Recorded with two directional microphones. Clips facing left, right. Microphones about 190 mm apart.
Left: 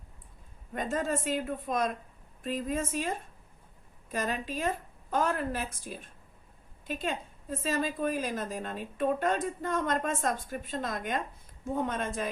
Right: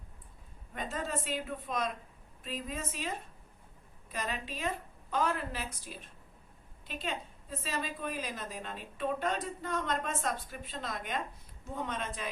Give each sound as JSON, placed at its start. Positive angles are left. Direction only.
{"t": 0.7, "sound": "a woman's voice", "side_deg": 45}